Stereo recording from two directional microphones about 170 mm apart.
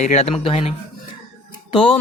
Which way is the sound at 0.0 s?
40° left (ahead or behind).